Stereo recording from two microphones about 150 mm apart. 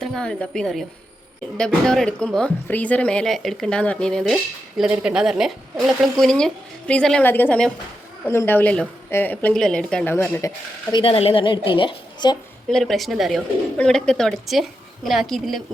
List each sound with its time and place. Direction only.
0.0 s a woman's voice: 5° left (ahead or behind)
10.9 s a woman's voice: 40° left (ahead or behind)
12.7 s a woman's voice: centre (ahead or behind)